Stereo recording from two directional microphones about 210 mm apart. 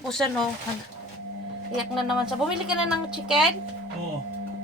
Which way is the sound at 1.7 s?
Centre (ahead or behind).